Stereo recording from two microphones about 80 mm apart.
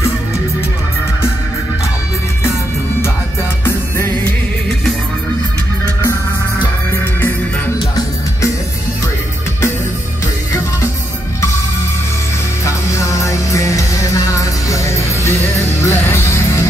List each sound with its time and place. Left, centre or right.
6.6 s music: left
13.2 s music: left